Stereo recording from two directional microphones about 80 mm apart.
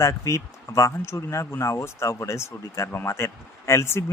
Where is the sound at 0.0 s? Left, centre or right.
Left.